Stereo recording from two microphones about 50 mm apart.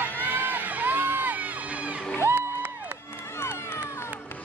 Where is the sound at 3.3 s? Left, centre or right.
Left.